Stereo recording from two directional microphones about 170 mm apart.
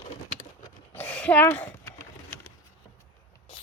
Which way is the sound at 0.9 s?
10° left (ahead or behind).